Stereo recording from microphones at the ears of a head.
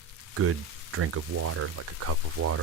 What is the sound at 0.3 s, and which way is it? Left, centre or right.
Speech, right.